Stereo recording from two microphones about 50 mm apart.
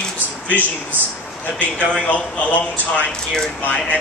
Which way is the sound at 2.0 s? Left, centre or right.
Left.